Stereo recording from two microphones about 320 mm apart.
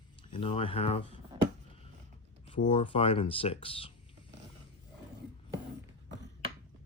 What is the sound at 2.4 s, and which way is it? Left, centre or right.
Speech, centre.